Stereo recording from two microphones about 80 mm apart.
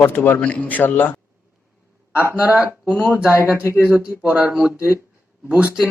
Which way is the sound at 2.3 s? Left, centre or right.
Centre.